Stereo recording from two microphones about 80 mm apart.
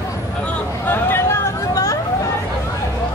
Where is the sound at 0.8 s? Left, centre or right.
Left.